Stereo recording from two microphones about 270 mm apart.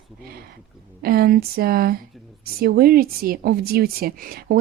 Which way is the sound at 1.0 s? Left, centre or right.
Right.